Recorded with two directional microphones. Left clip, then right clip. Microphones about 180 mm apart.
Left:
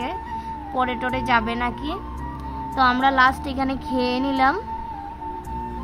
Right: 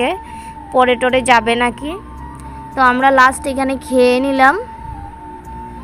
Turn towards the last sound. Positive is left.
turn(degrees=-20)  # may be behind; listen again after turning